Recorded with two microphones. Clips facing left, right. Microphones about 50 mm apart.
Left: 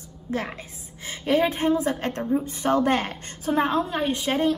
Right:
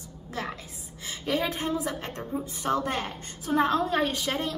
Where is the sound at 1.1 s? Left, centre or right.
Left.